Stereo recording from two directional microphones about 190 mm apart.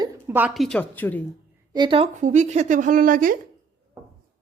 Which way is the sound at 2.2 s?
40° right (ahead or behind).